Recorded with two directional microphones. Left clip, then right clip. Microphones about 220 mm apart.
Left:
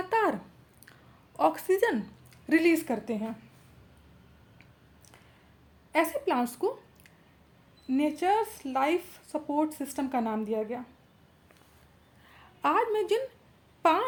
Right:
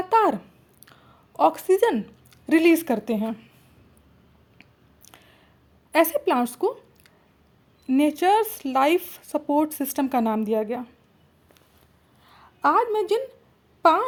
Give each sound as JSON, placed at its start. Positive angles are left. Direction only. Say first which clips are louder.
{"t": 0.1, "sound": "a sound", "louder": "right 8 dB", "side_deg": -25}
{"t": 0.9, "sound": "speech", "louder": "right 4 dB", "side_deg": -25}
{"t": 5.9, "sound": "a woman's voice", "louder": "right 7 dB", "side_deg": -40}
{"t": 12.3, "sound": "a woman's voice", "louder": "right 7 dB", "side_deg": -20}